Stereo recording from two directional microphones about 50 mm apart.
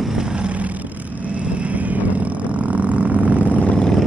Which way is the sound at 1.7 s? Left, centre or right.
Right.